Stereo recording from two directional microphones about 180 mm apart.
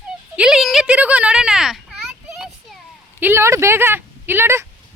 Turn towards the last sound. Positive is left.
turn(degrees=-15)  # may be behind; listen again after turning